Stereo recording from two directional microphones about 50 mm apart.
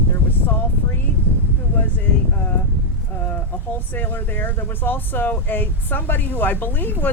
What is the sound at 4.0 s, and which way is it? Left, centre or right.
Speech, left.